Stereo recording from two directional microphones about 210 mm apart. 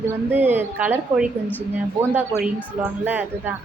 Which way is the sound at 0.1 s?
10° right (ahead or behind).